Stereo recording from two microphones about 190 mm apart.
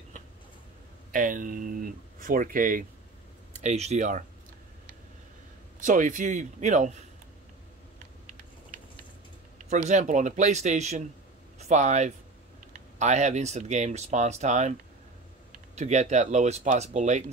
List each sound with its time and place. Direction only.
1.1 s speech: 45° right (ahead or behind)
5.8 s speech: 40° right (ahead or behind)
9.7 s speech: 40° right (ahead or behind)